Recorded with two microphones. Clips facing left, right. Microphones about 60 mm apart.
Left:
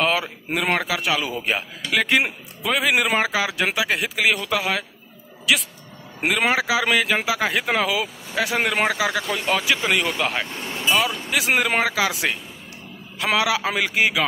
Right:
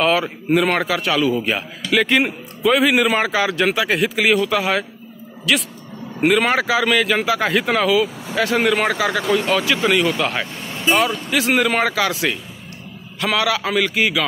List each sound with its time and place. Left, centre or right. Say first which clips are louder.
0.0 s a man's voice: right 4 dB; centre
9.8 s speech: right 5 dB; left
10.9 s speech: right 4 dB; centre